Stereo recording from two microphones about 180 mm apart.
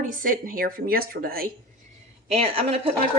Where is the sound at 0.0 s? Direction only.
50° right (ahead or behind).